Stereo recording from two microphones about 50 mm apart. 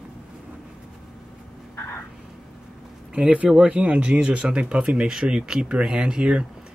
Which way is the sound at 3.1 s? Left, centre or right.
Right.